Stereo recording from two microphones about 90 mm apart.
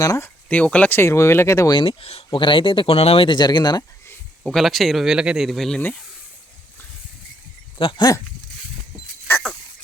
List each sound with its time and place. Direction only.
0.4 s speech: 15° left (ahead or behind); by 1.7 s 35° left (ahead or behind)
1.7 s speech: 75° left (ahead or behind)
3.3 s speech: 55° left (ahead or behind)
4.4 s speech: centre (ahead or behind)
7.8 s speech: 70° left (ahead or behind)